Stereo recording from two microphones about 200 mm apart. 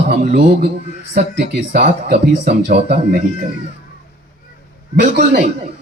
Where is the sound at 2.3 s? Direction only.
55° right (ahead or behind).